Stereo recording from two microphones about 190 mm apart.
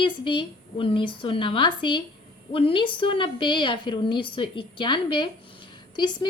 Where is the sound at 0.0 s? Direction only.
25° left (ahead or behind).